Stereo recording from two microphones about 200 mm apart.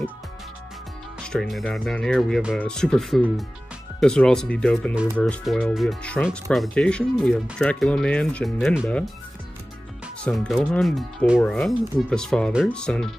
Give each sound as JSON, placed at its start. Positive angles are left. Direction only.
{"t": 1.2, "sound": "speech", "side_deg": 5}
{"t": 10.2, "sound": "speech", "side_deg": 5}